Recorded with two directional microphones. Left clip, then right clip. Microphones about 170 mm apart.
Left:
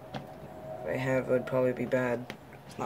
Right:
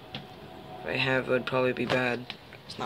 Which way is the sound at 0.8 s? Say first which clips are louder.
Right 3 dB; 5° right (ahead or behind).